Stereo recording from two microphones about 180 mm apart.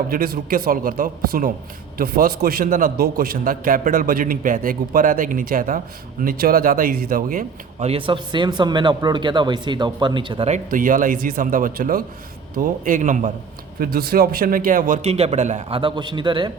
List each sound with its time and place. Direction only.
0.1 s a man's voice: 55° right (ahead or behind)
7.9 s speech: 30° right (ahead or behind)
10.5 s a man's voice: 50° right (ahead or behind)
13.7 s a man's voice: 55° right (ahead or behind); by 15.8 s 40° right (ahead or behind)
15.8 s speech: 25° right (ahead or behind)